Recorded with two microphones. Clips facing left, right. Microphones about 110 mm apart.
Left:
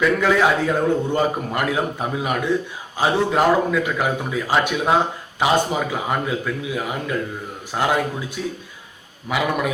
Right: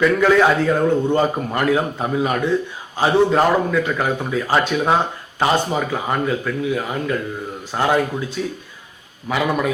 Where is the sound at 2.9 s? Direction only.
5° left (ahead or behind).